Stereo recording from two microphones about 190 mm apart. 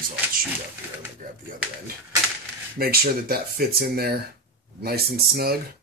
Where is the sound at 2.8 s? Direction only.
50° right (ahead or behind).